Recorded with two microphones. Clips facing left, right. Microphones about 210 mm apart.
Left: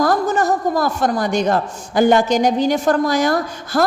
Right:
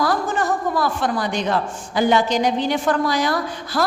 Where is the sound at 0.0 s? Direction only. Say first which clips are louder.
Left 4 dB; 45° left (ahead or behind).